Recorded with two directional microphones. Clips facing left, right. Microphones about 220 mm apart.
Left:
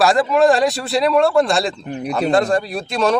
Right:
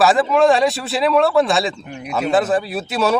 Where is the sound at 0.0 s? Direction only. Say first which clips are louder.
Even; centre (ahead or behind).